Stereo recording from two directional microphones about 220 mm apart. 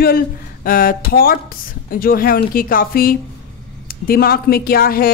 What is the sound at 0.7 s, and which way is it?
Speech, 40° left (ahead or behind).